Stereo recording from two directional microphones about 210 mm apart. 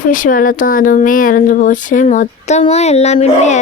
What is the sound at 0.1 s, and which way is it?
Speech, 40° left (ahead or behind).